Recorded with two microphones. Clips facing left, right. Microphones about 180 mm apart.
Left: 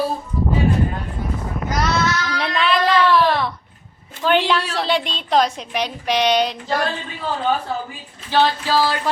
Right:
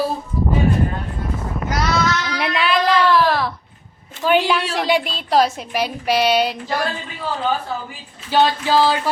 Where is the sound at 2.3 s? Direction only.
10° right (ahead or behind).